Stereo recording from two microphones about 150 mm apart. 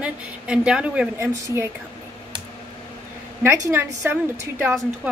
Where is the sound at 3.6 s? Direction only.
15° right (ahead or behind).